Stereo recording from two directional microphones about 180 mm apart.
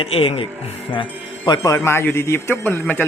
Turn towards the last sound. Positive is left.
turn(degrees=10)  # may be behind; listen again after turning